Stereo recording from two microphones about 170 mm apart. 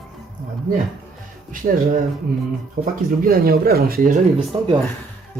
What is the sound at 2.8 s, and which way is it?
Speech, 55° right (ahead or behind).